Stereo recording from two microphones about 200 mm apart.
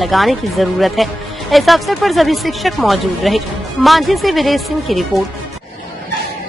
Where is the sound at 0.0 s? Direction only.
Centre (ahead or behind).